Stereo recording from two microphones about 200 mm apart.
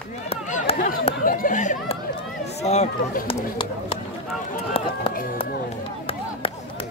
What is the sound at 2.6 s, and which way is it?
Speech, 35° left (ahead or behind).